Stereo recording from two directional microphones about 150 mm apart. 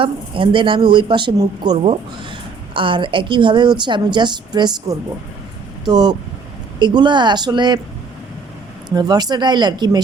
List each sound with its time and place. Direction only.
0.0 s a woman's voice: 35° right (ahead or behind)
9.0 s speech: 25° right (ahead or behind)